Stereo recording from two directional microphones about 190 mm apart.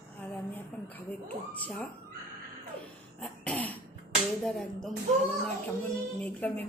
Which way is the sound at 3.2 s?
5° left (ahead or behind).